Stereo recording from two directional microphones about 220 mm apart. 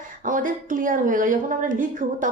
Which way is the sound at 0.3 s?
35° right (ahead or behind).